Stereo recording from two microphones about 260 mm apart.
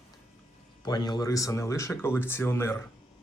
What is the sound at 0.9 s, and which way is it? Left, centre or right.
Speech, centre.